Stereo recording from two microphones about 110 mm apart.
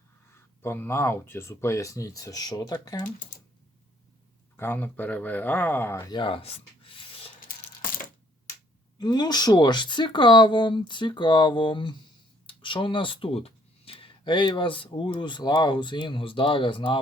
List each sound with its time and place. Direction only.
0.6 s speech: 20° left (ahead or behind)
4.5 s speech: 20° left (ahead or behind)
6.1 s speech: 45° left (ahead or behind)
7.0 s a sound: 55° left (ahead or behind)
9.0 s speech: 40° left (ahead or behind)